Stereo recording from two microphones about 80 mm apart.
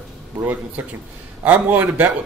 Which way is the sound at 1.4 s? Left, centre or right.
Centre.